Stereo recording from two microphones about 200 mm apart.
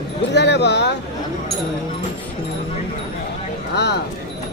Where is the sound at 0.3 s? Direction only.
60° left (ahead or behind).